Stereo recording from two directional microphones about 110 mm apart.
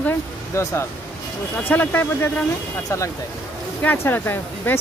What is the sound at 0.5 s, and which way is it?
Speech, 25° left (ahead or behind).